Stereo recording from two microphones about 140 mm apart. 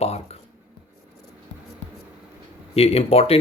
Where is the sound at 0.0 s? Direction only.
50° left (ahead or behind).